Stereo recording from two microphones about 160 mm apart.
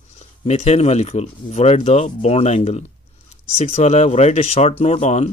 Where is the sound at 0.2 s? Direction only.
45° left (ahead or behind).